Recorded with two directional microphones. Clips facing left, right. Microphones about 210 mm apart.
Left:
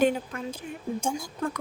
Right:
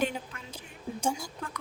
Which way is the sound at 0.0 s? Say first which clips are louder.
Left 8 dB; 50° left (ahead or behind).